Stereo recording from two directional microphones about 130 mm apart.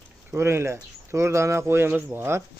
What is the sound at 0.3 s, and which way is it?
Speech, 20° right (ahead or behind).